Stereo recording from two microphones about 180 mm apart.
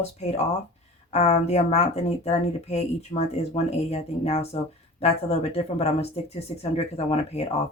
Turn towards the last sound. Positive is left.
turn(degrees=35)  # may be behind; listen again after turning